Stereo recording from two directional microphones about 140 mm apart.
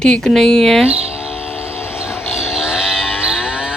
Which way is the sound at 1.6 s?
15° left (ahead or behind).